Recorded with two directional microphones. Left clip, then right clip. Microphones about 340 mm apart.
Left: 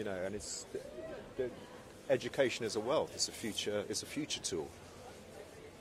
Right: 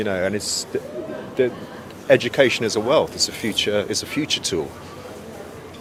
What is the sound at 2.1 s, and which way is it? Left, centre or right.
Speech, left.